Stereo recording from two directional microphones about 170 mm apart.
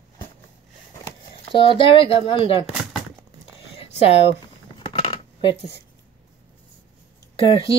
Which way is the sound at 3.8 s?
35° left (ahead or behind).